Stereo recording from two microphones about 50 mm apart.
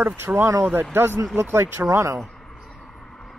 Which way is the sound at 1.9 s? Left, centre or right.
Right.